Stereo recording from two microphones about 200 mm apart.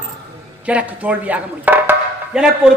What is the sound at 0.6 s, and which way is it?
Speech, 5° right (ahead or behind).